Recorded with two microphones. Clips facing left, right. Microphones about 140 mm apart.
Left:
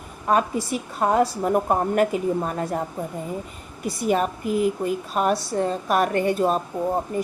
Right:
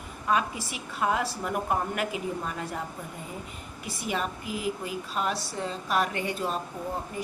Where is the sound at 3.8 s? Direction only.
45° left (ahead or behind).